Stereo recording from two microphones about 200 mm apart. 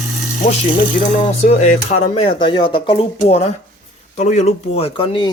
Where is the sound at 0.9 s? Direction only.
35° left (ahead or behind).